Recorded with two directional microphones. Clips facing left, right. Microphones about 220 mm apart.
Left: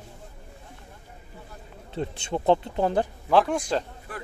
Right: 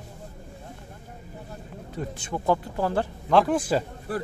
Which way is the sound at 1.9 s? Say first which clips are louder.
Left 3 dB; 25° left (ahead or behind).